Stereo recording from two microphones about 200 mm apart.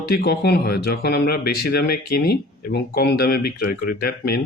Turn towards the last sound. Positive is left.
turn(degrees=50)  # may be behind; listen again after turning